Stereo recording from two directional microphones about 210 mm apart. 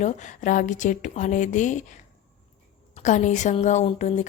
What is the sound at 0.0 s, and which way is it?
A woman's voice, 35° left (ahead or behind).